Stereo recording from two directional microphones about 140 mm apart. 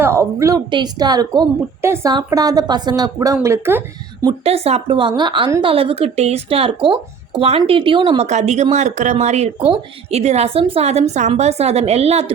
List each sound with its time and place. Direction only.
0.0 s a woman's voice: 20° right (ahead or behind)
1.8 s a woman's voice: 15° right (ahead or behind)
2.0 s a woman's voice: 30° right (ahead or behind)
4.4 s a woman's voice: 45° right (ahead or behind)